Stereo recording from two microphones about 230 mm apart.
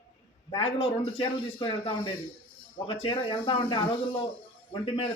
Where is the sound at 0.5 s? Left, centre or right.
Left.